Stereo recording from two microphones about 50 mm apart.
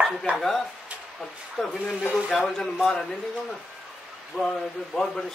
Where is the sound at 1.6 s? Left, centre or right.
Centre.